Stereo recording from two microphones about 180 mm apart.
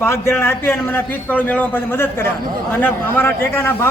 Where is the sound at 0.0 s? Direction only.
15° left (ahead or behind).